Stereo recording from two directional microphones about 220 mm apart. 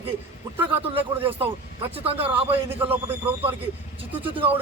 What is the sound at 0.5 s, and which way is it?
Speech, 10° right (ahead or behind).